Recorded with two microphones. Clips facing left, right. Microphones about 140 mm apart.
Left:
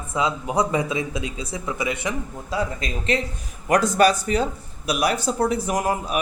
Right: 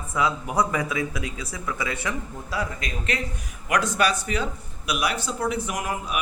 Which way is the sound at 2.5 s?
30° left (ahead or behind).